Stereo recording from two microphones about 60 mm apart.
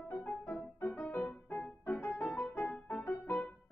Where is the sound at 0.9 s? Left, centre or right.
Left.